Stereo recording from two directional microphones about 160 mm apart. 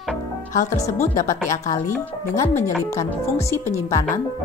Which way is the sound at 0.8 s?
20° left (ahead or behind).